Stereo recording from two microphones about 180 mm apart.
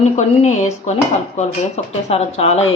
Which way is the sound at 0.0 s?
40° left (ahead or behind).